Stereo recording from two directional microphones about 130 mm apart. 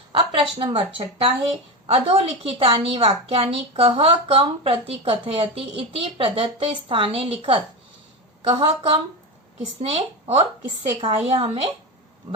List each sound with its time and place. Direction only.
0.1 s a woman's voice: 45° right (ahead or behind)